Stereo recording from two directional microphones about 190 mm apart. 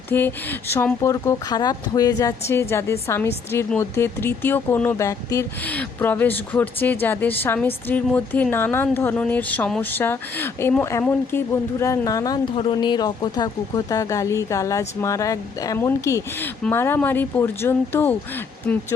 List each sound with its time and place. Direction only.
0.1 s speech: 10° left (ahead or behind)